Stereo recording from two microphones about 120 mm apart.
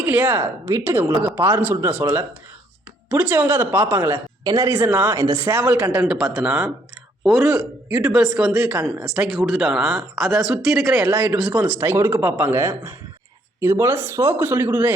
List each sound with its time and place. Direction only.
0.0 s a man's voice: 15° right (ahead or behind)
3.1 s a man's voice: 15° right (ahead or behind)
4.4 s speech: 35° right (ahead or behind)
4.7 s a man's voice: 15° right (ahead or behind)